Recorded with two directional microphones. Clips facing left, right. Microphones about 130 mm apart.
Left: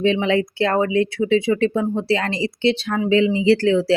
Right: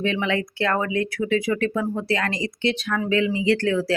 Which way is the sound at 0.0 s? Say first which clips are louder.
Left 6 dB; 30° left (ahead or behind).